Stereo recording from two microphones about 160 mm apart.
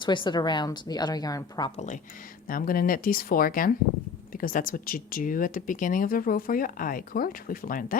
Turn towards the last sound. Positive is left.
turn(degrees=60)  # may be behind; listen again after turning